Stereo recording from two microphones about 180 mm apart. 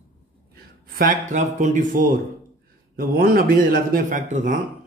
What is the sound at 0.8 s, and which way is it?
Speech, 50° right (ahead or behind).